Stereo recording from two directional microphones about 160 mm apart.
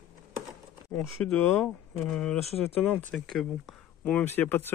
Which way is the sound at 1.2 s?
10° left (ahead or behind).